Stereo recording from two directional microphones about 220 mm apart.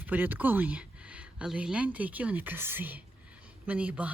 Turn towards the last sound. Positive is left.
turn(degrees=-5)  # may be behind; listen again after turning